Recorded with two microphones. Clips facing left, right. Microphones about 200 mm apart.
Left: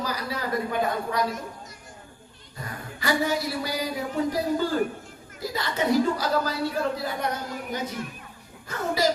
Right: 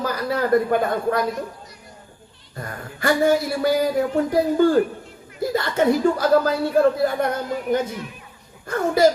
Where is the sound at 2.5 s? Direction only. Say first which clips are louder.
Right 4 dB; 55° right (ahead or behind).